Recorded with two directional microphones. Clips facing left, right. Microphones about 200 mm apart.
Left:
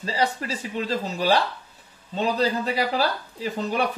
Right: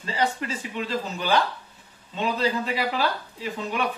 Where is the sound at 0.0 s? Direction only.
35° left (ahead or behind).